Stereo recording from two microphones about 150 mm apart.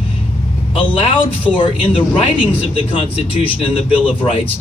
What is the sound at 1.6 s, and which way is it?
Speech, 35° left (ahead or behind).